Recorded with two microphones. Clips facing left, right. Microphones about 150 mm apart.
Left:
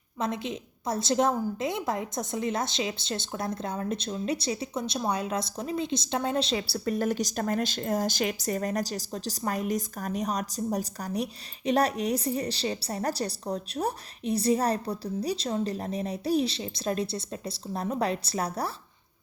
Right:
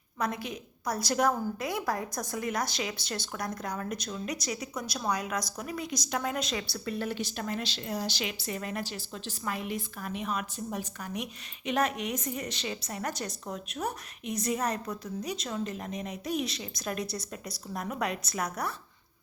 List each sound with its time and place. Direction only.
0.2 s a woman's voice: 25° left (ahead or behind)